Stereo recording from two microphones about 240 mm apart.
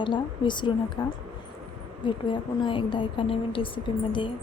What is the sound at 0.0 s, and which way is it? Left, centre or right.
A woman's voice, centre.